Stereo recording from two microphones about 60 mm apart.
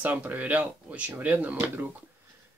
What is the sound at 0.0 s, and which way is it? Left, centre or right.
Speech, right.